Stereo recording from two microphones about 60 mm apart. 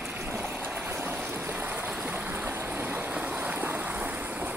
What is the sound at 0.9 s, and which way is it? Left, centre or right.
Boat, right.